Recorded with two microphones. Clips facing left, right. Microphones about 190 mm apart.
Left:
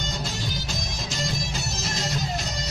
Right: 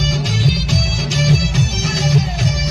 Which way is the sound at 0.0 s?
90° right.